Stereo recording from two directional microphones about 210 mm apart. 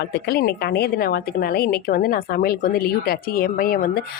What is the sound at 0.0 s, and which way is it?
A woman's voice, 50° left (ahead or behind).